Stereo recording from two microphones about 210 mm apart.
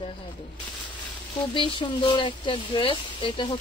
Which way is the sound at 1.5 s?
25° left (ahead or behind).